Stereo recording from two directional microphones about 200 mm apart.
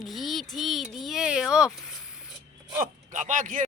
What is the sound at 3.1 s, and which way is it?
Speech, 40° right (ahead or behind).